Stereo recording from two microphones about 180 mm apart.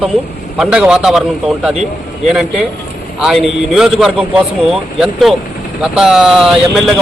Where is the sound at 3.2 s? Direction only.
Centre (ahead or behind).